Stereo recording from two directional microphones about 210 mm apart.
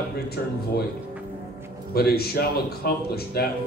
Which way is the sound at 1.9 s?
50° left (ahead or behind).